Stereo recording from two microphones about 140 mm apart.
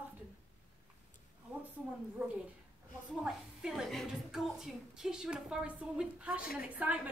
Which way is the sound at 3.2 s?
5° right (ahead or behind).